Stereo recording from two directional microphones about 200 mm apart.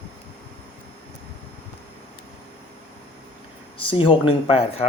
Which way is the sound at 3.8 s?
25° left (ahead or behind).